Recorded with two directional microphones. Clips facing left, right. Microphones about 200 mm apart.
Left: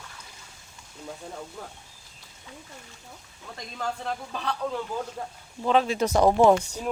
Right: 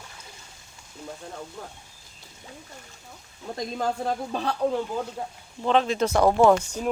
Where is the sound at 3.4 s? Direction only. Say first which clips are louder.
Right 6 dB; 40° right (ahead or behind).